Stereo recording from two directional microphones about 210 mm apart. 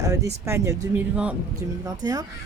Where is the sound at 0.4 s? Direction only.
15° right (ahead or behind).